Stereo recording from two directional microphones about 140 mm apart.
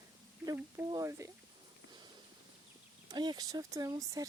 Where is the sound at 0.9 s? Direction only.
25° right (ahead or behind).